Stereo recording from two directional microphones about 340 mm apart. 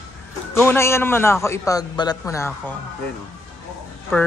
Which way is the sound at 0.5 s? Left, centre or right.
Centre.